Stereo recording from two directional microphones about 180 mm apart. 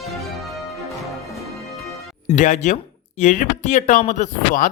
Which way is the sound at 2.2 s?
45° left (ahead or behind).